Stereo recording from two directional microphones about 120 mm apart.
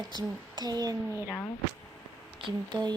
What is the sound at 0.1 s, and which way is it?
Speech, 35° right (ahead or behind).